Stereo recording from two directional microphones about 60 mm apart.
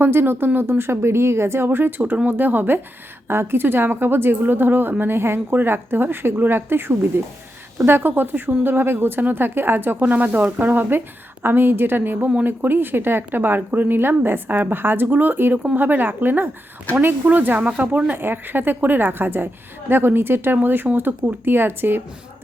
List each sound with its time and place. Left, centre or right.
0.0 s a woman's voice: right
18.1 s a woman's voice: right